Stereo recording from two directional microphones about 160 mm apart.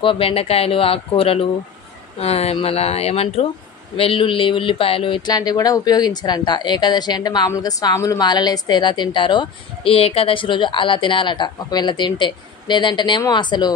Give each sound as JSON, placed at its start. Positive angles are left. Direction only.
{"t": 0.0, "sound": "speech", "side_deg": 35}